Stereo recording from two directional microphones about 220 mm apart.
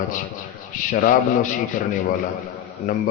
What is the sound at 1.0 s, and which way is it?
Speech, 35° left (ahead or behind).